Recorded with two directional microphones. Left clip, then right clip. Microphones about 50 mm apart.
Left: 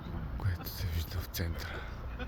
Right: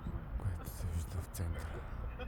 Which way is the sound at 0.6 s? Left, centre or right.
Centre.